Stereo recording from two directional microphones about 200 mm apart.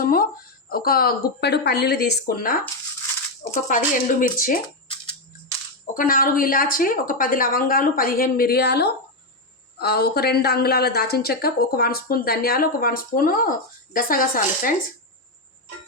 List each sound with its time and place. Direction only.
0.0 s a woman's voice: 45° left (ahead or behind)
5.8 s a woman's voice: 45° left (ahead or behind)